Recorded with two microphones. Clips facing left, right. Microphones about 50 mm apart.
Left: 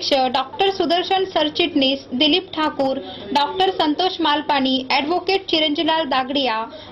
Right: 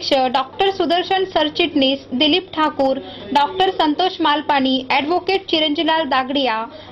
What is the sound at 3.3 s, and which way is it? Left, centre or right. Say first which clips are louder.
Speech: right 2 dB; centre.